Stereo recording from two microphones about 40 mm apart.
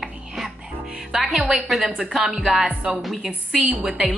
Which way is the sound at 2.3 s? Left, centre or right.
Right.